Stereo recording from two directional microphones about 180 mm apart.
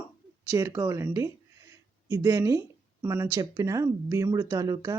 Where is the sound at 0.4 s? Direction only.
15° right (ahead or behind).